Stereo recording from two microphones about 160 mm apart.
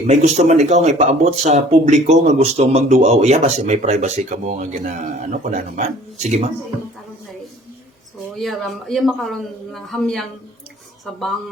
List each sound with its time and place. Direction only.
0.1 s speech: 45° right (ahead or behind)
8.4 s a man's voice: centre (ahead or behind)